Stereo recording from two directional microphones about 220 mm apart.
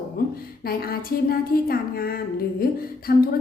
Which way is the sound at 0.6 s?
45° left (ahead or behind).